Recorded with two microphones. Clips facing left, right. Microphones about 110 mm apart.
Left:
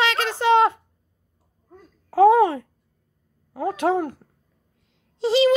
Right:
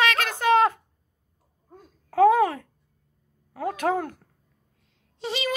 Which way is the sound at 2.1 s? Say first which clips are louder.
Left 3 dB; 30° left (ahead or behind).